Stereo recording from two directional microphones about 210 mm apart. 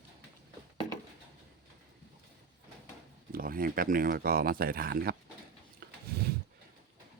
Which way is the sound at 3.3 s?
45° right (ahead or behind).